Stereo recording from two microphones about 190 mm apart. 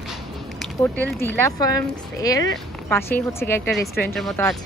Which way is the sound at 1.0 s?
10° left (ahead or behind).